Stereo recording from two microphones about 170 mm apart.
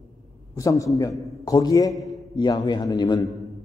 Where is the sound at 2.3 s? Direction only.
25° left (ahead or behind).